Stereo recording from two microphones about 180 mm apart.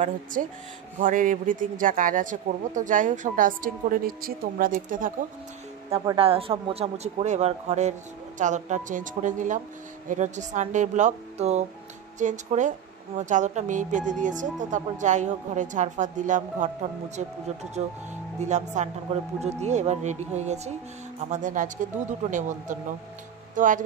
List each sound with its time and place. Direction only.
0.0 s speech: 50° right (ahead or behind)
6.1 s speech: 30° right (ahead or behind)
18.4 s speech: 40° right (ahead or behind)